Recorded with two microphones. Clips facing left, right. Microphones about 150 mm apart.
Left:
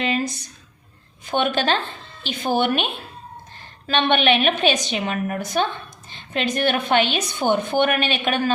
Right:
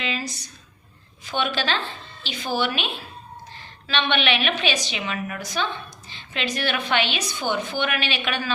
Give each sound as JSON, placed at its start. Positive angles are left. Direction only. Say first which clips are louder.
{"t": 0.0, "sound": "a woman's voice", "louder": "left 6 dB", "side_deg": 50}